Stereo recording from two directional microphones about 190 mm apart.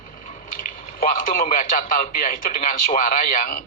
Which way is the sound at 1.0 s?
45° left (ahead or behind).